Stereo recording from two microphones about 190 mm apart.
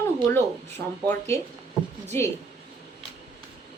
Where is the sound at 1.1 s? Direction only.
10° left (ahead or behind).